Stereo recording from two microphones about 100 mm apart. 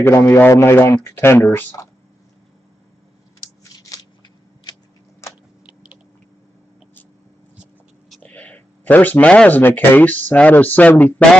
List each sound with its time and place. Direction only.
0.0 s speech: 30° left (ahead or behind)
3.6 s scissors: 40° left (ahead or behind)
8.2 s speech: 15° left (ahead or behind)